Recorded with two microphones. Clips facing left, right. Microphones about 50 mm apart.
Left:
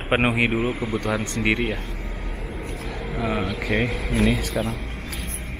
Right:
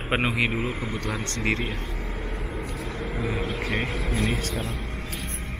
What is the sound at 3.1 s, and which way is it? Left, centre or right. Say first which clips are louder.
Speech: left 5 dB; left.